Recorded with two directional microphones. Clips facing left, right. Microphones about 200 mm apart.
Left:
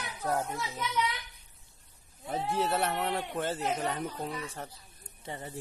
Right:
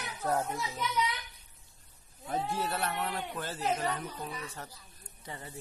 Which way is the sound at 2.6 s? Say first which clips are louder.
Left 4 dB; 25° left (ahead or behind).